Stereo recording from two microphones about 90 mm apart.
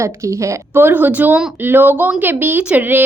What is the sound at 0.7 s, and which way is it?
A woman's voice, 20° right (ahead or behind).